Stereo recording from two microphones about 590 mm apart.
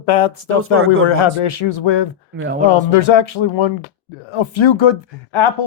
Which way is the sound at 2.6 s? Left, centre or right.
Left.